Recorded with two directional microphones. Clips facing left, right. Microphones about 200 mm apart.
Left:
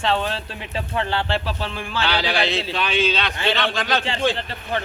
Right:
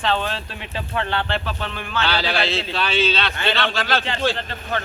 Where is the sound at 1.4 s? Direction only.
30° left (ahead or behind).